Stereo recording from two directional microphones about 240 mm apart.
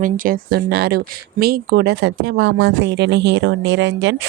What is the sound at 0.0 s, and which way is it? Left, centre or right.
Speech, right.